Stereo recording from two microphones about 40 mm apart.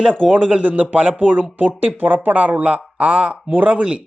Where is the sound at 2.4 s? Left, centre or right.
Right.